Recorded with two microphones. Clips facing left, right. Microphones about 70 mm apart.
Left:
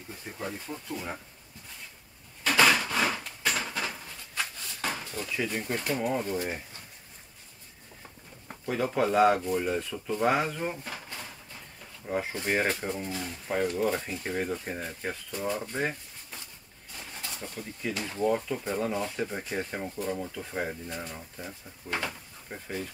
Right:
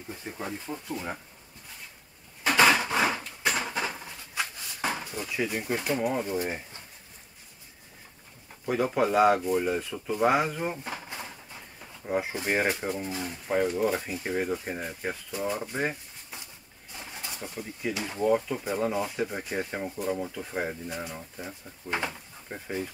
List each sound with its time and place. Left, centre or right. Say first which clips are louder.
0.1 s speech: right 1 dB; centre
2.4 s a sound: right 2 dB; centre
8.6 s speech: right 2 dB; centre